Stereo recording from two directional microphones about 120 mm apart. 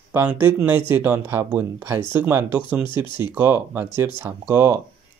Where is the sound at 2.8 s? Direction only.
40° left (ahead or behind).